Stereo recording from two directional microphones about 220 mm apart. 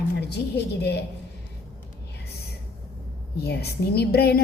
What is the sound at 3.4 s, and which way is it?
A woman's voice, 45° left (ahead or behind).